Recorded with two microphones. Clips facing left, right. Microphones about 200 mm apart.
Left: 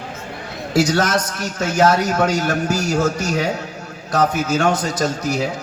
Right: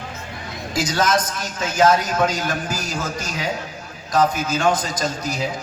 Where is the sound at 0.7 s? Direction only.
70° left (ahead or behind).